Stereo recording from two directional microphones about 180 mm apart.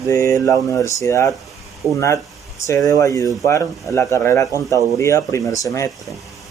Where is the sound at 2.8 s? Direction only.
15° left (ahead or behind).